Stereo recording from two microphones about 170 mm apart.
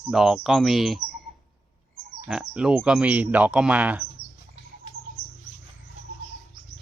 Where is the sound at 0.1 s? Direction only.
Centre (ahead or behind).